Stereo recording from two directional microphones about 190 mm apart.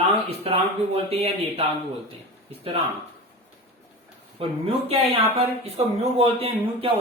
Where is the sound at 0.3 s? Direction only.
35° right (ahead or behind).